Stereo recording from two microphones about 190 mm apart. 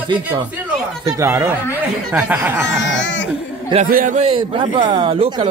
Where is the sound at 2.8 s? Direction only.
75° left (ahead or behind).